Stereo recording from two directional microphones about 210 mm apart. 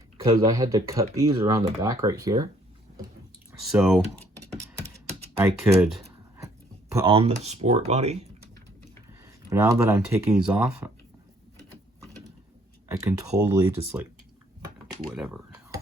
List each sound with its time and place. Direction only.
0.2 s speech: 15° right (ahead or behind)
3.7 s speech: centre (ahead or behind)
5.4 s speech: 10° right (ahead or behind)
5.9 s a sound: 10° right (ahead or behind)
6.9 s speech: 25° right (ahead or behind)
9.2 s speech: 15° right (ahead or behind)
13.0 s speech: 15° right (ahead or behind)
15.1 s speech: 5° right (ahead or behind)